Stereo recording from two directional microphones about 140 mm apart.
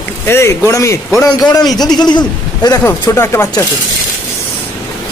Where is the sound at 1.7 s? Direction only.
30° left (ahead or behind).